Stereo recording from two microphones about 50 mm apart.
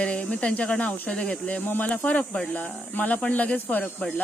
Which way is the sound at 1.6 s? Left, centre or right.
Left.